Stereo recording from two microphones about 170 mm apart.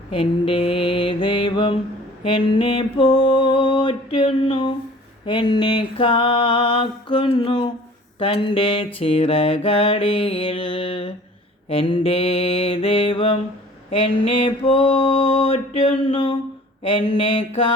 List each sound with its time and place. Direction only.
0.1 s mantra: 35° left (ahead or behind)
2.2 s a sound: 30° left (ahead or behind)
8.2 s mantra: 30° left (ahead or behind)
14.7 s mantra: 30° left (ahead or behind)